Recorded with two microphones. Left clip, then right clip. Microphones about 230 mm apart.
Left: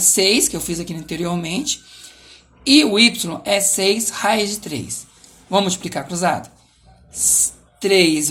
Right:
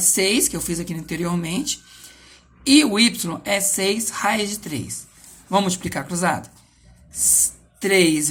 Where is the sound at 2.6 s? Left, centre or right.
Right.